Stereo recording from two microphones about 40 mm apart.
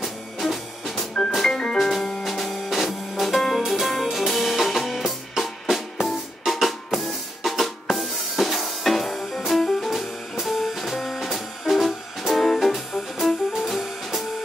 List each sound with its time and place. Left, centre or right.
0.0 s music: centre
1.5 s music: left
1.8 s music: centre
5.4 s drum: centre
7.9 s music: centre